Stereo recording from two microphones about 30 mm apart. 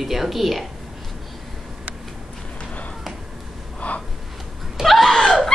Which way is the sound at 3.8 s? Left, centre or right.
Left.